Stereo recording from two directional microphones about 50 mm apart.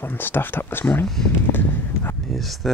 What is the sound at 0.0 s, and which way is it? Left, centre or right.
Speech, left.